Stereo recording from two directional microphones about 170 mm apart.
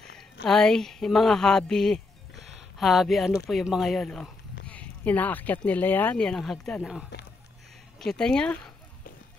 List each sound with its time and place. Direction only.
0.0 s speech: 5° left (ahead or behind)